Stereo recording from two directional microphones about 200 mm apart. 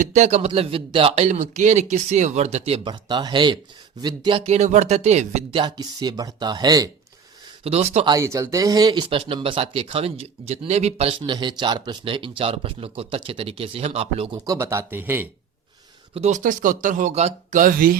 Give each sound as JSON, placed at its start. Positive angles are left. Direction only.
{"t": 0.0, "sound": "speech", "side_deg": -35}
{"t": 7.6, "sound": "speech", "side_deg": -30}
{"t": 8.1, "sound": "speech", "side_deg": -15}
{"t": 16.1, "sound": "speech", "side_deg": -35}